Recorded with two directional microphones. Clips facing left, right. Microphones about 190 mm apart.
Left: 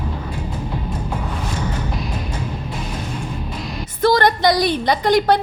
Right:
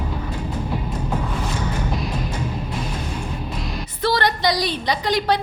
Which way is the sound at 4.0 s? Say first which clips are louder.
Left 5 dB; 45° left (ahead or behind).